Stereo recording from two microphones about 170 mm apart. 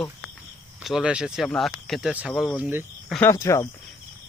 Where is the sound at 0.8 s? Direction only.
5° right (ahead or behind).